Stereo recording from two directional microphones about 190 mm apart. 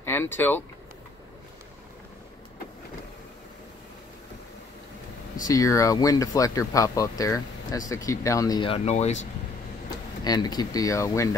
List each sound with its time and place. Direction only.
0.0 s speech: 10° left (ahead or behind)
5.4 s speech: 20° left (ahead or behind); by 9.3 s 35° left (ahead or behind)
9.8 s speech: 20° left (ahead or behind)